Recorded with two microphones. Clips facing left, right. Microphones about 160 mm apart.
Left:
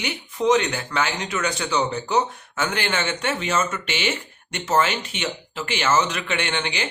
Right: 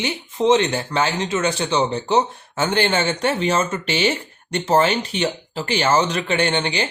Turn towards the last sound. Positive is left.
turn(degrees=-35)  # may be behind; listen again after turning